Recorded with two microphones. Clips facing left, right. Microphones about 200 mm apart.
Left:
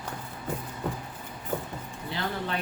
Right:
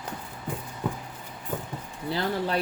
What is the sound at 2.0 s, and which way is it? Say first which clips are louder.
Speech: right 5 dB; 35° right (ahead or behind).